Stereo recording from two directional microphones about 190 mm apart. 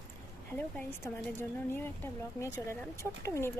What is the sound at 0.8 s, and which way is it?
A woman's voice, 10° left (ahead or behind).